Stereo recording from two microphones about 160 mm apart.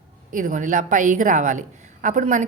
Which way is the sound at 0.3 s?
55° right (ahead or behind).